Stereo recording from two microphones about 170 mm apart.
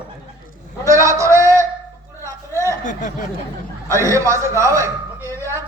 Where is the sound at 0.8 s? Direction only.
20° right (ahead or behind).